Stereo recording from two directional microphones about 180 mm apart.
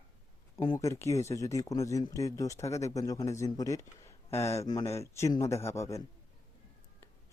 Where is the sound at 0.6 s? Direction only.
20° left (ahead or behind).